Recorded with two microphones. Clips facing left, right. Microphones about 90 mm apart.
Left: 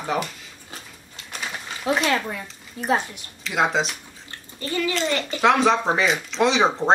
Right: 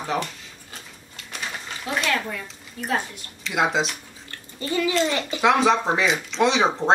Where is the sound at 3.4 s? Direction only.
Centre (ahead or behind).